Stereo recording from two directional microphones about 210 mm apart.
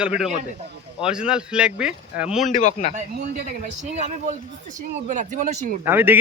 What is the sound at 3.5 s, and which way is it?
Speech, 35° right (ahead or behind).